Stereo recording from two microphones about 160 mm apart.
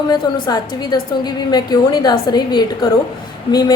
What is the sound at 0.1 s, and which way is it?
A woman's voice, 25° left (ahead or behind).